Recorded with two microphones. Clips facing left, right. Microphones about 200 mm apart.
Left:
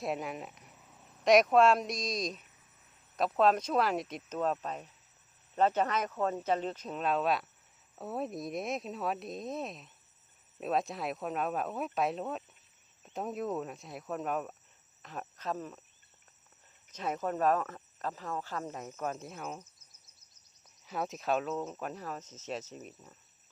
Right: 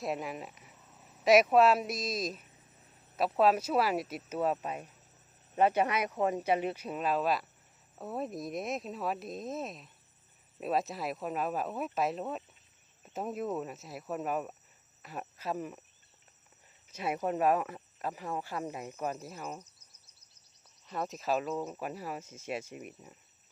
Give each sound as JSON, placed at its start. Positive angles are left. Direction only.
{"t": 0.0, "sound": "speech", "side_deg": 0}
{"t": 16.9, "sound": "speech", "side_deg": -10}
{"t": 20.8, "sound": "speech", "side_deg": 0}